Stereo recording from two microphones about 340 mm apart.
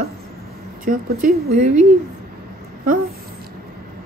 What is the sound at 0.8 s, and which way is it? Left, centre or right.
Speech, right.